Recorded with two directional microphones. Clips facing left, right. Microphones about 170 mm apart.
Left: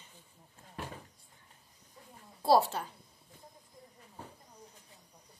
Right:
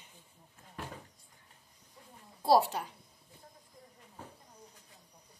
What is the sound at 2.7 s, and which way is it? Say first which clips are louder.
Speech: even; 15° right (ahead or behind).